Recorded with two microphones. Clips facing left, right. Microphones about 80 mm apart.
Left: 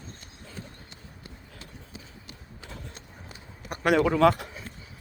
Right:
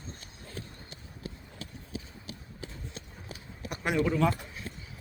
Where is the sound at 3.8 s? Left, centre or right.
Left.